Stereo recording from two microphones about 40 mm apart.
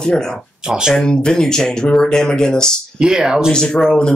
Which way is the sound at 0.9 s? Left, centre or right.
Centre.